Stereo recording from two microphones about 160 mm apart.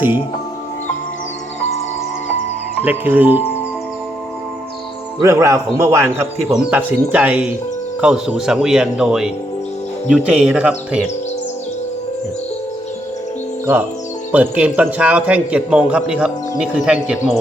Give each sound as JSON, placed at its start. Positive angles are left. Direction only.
{"t": 2.8, "sound": "a man's voice", "side_deg": -10}
{"t": 5.2, "sound": "a man's voice", "side_deg": -20}
{"t": 14.3, "sound": "a man's voice", "side_deg": -10}